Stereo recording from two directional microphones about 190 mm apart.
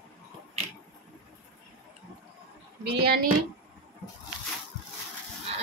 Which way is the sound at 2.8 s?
55° right (ahead or behind).